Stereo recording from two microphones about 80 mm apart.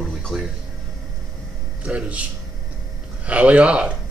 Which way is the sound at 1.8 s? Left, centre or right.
Centre.